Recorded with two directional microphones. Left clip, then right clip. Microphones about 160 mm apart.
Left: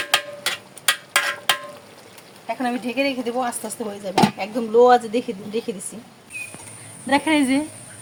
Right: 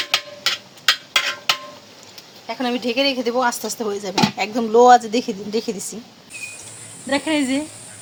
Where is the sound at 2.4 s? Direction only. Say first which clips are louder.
Right 2 dB; 30° right (ahead or behind).